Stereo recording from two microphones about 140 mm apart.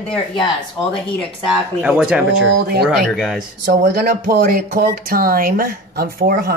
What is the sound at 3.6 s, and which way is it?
Speech, 90° right.